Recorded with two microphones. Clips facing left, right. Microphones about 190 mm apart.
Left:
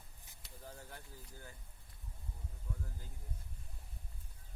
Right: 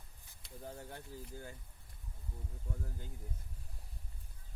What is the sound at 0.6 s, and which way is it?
Speech, 25° right (ahead or behind).